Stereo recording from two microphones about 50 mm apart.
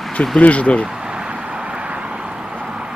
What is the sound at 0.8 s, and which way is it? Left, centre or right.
Vehicle, centre.